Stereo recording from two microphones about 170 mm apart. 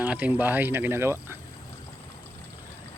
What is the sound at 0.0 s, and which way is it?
Speech, 10° right (ahead or behind).